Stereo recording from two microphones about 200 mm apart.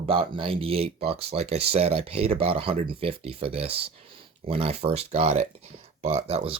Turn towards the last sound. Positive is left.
turn(degrees=-30)  # may be behind; listen again after turning